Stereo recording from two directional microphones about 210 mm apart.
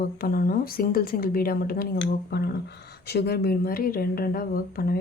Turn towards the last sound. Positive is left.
turn(degrees=45)  # may be behind; listen again after turning